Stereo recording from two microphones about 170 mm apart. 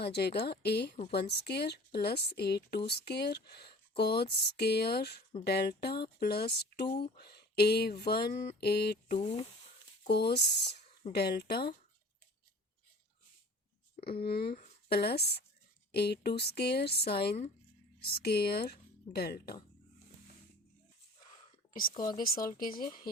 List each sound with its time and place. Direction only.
0.0 s a woman's voice: 75° left (ahead or behind)
9.1 s speech: 35° left (ahead or behind)
10.2 s a woman's voice: 75° left (ahead or behind)
14.1 s a woman's voice: 65° left (ahead or behind)
21.7 s speech: 55° left (ahead or behind)
21.9 s speech: 25° left (ahead or behind)
22.2 s speech: 55° left (ahead or behind)